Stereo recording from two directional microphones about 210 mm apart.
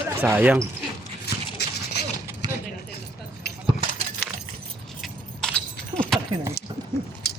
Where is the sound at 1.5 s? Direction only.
50° left (ahead or behind).